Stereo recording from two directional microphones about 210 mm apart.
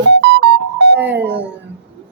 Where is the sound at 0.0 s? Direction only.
55° right (ahead or behind).